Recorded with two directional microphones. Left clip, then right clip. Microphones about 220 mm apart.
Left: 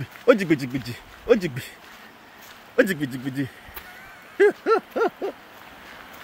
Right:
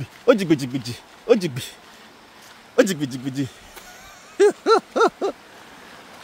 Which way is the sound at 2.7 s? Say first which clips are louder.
Right 2 dB; 20° right (ahead or behind).